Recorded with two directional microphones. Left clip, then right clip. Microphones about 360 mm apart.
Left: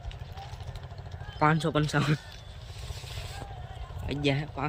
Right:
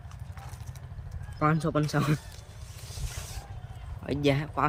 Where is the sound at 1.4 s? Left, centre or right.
Centre.